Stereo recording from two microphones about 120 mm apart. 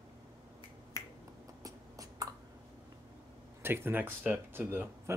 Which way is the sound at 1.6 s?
30° right (ahead or behind).